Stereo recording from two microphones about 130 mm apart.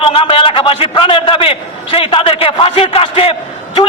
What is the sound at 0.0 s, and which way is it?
A man's voice, 45° left (ahead or behind).